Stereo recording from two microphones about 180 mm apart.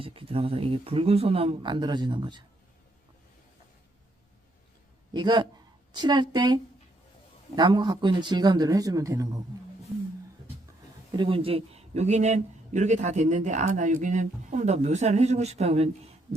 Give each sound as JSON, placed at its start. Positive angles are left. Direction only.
{"t": 0.0, "sound": "a man's voice", "side_deg": -30}
{"t": 5.1, "sound": "speech", "side_deg": -25}
{"t": 11.2, "sound": "a man's voice", "side_deg": -30}